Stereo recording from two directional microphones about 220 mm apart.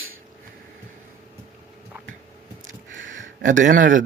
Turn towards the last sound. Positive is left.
turn(degrees=-35)  # may be behind; listen again after turning